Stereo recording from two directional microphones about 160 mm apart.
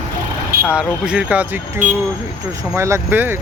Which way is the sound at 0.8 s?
5° right (ahead or behind).